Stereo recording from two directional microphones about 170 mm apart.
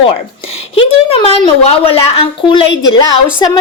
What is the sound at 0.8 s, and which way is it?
A woman's voice, 35° left (ahead or behind).